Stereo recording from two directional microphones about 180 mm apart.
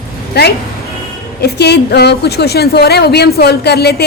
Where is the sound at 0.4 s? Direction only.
65° left (ahead or behind).